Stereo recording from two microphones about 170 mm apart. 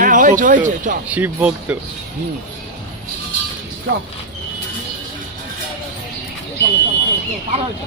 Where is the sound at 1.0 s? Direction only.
10° right (ahead or behind).